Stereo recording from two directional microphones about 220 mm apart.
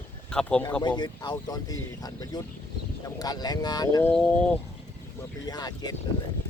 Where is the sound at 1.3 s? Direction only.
15° left (ahead or behind).